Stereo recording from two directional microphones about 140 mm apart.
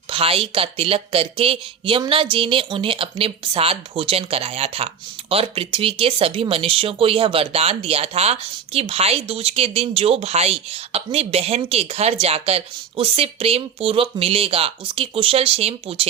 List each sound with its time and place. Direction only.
0.1 s speech: 40° right (ahead or behind)